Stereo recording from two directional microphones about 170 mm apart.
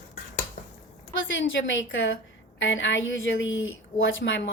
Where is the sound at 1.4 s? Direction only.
90° left.